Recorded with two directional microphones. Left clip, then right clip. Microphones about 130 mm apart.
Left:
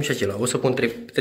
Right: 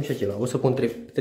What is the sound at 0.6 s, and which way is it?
Speech, 40° right (ahead or behind).